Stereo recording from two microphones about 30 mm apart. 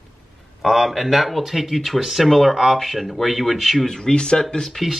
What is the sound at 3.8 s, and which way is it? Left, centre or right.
Speech, left.